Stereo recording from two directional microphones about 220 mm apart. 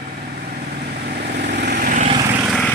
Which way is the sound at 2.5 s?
5° left (ahead or behind).